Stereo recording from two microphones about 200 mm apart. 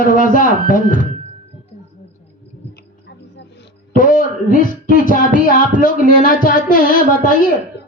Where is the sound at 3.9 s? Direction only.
40° left (ahead or behind).